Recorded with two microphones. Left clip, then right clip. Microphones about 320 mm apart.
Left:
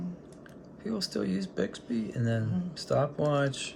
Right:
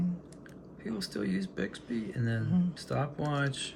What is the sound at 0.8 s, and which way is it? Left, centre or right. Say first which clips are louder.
Speech: left 3 dB; centre.